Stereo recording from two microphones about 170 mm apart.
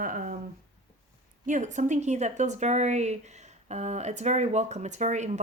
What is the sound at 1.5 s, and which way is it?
Speech, 45° right (ahead or behind).